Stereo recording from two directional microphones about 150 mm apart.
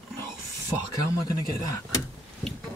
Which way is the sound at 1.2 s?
20° left (ahead or behind).